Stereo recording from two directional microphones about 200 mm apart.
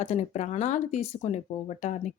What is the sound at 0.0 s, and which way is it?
Speech, 35° left (ahead or behind).